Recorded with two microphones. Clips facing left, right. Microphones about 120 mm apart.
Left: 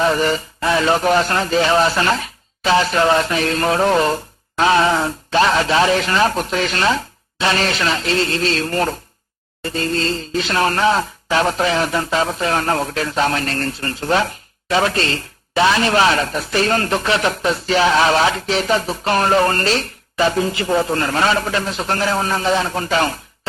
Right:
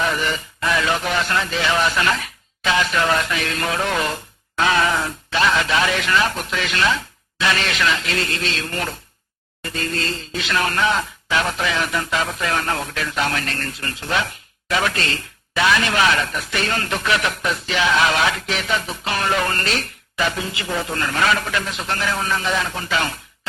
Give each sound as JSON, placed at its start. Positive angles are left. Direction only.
{"t": 0.0, "sound": "speech", "side_deg": 35}